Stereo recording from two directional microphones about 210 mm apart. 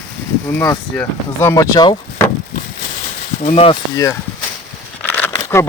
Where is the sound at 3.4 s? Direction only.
30° left (ahead or behind).